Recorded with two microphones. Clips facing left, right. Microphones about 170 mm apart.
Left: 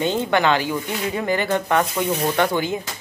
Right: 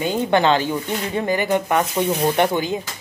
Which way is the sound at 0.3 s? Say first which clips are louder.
Right 4 dB; 25° right (ahead or behind).